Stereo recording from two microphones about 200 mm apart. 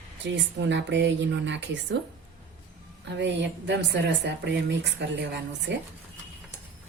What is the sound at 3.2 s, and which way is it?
Speech, 60° right (ahead or behind).